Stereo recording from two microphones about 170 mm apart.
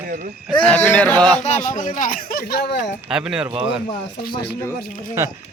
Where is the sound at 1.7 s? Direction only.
50° left (ahead or behind); by 2.9 s 85° left.